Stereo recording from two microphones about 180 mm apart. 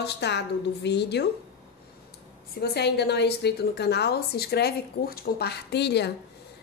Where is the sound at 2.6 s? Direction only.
65° left (ahead or behind).